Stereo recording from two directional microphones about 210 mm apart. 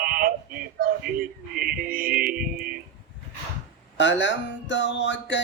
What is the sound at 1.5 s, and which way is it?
Music, 45° right (ahead or behind).